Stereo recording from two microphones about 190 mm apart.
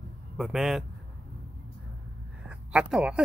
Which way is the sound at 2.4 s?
5° right (ahead or behind).